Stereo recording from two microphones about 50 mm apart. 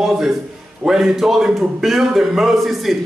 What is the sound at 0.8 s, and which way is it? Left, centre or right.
A man's voice, centre.